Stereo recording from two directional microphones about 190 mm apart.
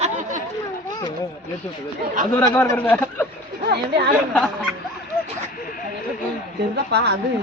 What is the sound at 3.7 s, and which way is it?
Speech, 60° right (ahead or behind).